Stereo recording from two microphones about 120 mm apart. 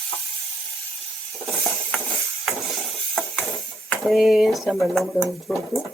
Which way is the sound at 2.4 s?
Centre (ahead or behind).